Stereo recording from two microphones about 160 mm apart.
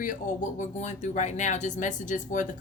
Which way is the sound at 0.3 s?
55° left (ahead or behind).